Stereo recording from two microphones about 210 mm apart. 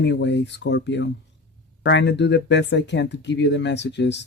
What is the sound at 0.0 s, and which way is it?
Speech, 55° left (ahead or behind).